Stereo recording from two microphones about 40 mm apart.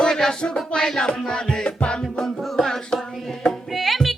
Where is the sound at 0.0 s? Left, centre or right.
Centre.